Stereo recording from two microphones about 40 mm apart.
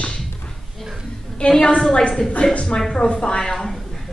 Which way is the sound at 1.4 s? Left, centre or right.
Left.